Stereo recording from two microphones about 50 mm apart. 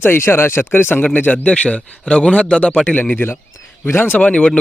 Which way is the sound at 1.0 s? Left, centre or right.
Left.